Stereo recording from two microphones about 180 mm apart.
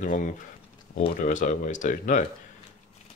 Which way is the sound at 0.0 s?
45° left (ahead or behind).